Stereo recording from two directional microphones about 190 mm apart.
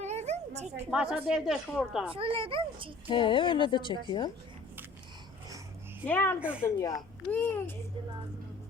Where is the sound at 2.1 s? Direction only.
30° right (ahead or behind).